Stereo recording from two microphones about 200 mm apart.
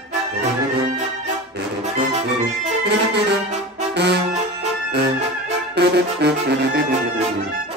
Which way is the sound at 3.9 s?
55° right (ahead or behind).